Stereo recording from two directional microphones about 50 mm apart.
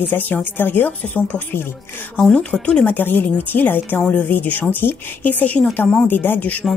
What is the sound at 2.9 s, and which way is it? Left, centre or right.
Speech, left.